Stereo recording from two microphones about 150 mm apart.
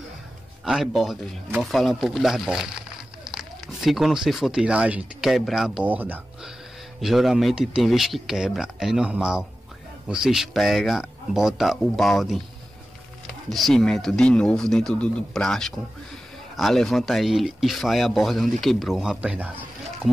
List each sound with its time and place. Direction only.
0.7 s speech: centre (ahead or behind)
13.5 s speech: centre (ahead or behind)